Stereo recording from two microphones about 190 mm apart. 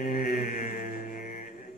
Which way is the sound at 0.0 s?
45° left (ahead or behind).